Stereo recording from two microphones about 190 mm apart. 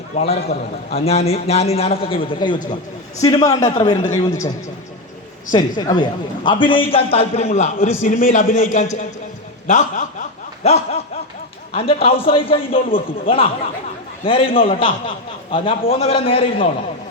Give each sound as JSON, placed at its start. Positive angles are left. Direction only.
{"t": 0.1, "sound": "a man's voice", "side_deg": 35}
{"t": 3.6, "sound": "a man's voice", "side_deg": 40}
{"t": 5.5, "sound": "a man's voice", "side_deg": 20}